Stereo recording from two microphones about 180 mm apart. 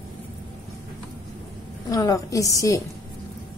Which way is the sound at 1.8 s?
20° left (ahead or behind).